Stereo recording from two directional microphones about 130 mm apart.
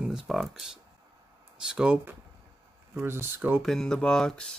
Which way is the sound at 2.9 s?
20° right (ahead or behind).